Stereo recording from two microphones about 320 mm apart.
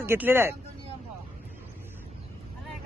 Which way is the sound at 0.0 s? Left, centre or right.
Centre.